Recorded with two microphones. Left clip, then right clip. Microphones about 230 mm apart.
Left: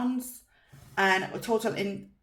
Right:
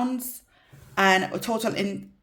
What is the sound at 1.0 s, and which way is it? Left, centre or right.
Speech, right.